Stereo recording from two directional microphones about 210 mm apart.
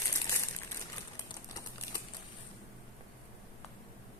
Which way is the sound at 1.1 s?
15° left (ahead or behind).